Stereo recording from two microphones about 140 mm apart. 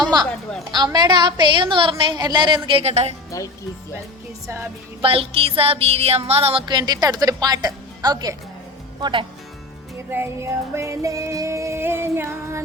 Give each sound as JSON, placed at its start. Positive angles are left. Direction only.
{"t": 0.0, "sound": "a sound", "side_deg": -30}
{"t": 0.7, "sound": "music", "side_deg": -30}
{"t": 2.8, "sound": "a woman's voice", "side_deg": -50}
{"t": 5.0, "sound": "music", "side_deg": -40}
{"t": 9.0, "sound": "speech", "side_deg": -30}
{"t": 10.1, "sound": "music", "side_deg": -15}